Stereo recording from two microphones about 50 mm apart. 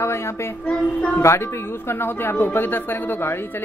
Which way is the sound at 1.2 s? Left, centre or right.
Left.